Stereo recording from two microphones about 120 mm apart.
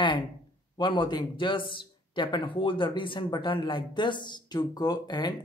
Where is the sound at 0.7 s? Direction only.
40° left (ahead or behind).